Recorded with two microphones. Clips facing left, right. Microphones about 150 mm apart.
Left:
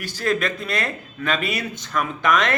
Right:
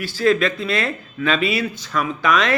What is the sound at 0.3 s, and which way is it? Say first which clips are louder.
Speech: right 5 dB; 45° left (ahead or behind).